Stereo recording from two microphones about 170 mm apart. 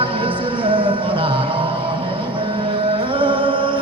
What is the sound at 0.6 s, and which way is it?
Music, 30° right (ahead or behind).